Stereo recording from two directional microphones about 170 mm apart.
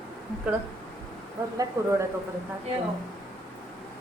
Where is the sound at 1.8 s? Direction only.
20° right (ahead or behind).